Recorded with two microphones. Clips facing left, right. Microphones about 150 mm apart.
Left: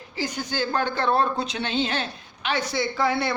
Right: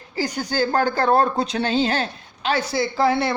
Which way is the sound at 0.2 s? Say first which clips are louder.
Right 5 dB; 40° right (ahead or behind).